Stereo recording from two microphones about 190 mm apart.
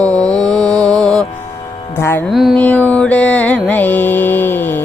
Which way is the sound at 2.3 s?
Centre (ahead or behind).